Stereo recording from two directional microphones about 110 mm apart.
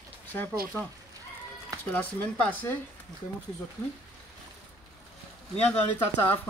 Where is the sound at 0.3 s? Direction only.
15° left (ahead or behind).